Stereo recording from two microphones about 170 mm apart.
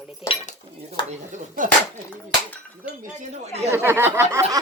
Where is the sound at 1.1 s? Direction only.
50° right (ahead or behind).